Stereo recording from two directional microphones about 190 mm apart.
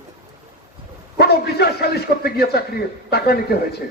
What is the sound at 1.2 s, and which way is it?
A man's voice, 55° left (ahead or behind).